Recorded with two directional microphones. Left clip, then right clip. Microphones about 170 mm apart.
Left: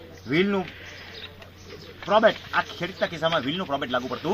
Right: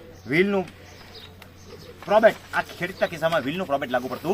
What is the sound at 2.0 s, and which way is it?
A man's voice, 20° right (ahead or behind).